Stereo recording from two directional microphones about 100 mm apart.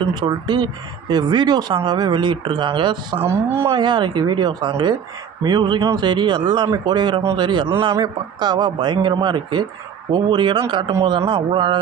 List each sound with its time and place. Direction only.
0.1 s a man's voice: 45° right (ahead or behind)
3.2 s speech: 25° right (ahead or behind)
3.7 s a man's voice: 50° right (ahead or behind)